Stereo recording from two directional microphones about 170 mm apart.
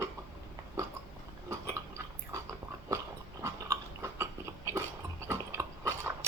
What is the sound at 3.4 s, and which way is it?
Dog, 15° right (ahead or behind).